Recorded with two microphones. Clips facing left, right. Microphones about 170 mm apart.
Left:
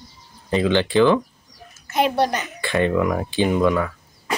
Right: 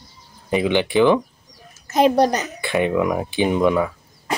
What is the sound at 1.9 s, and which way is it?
Speech, 40° right (ahead or behind).